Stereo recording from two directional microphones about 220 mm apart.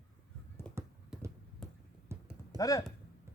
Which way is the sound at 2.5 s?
15° left (ahead or behind).